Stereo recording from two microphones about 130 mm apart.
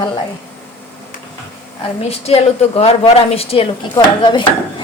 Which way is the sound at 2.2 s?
50° left (ahead or behind).